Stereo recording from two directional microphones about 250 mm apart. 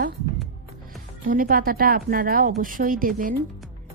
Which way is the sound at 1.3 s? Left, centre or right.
Right.